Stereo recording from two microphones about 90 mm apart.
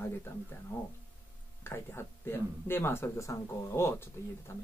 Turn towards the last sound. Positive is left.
turn(degrees=30)  # may be behind; listen again after turning